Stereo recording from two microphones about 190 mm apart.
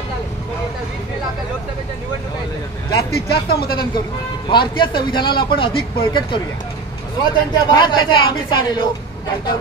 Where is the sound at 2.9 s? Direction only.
55° left (ahead or behind).